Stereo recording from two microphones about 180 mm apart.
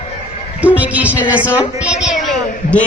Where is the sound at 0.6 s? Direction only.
10° right (ahead or behind).